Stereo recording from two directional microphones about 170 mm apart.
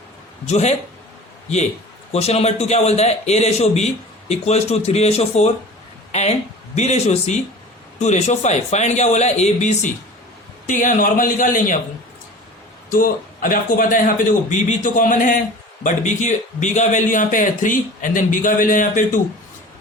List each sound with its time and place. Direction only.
0.4 s a man's voice: 40° left (ahead or behind)
2.1 s a man's voice: 40° left (ahead or behind)
12.9 s a man's voice: 55° left (ahead or behind)